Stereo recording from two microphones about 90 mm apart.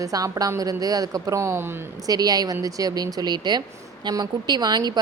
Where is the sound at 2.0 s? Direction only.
45° right (ahead or behind).